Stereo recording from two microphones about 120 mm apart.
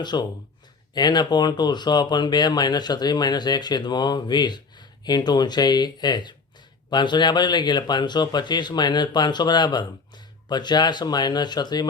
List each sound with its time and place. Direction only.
0.0 s speech: 35° left (ahead or behind)